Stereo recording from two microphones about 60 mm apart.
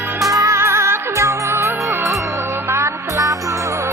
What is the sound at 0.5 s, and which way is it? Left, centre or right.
Music, right.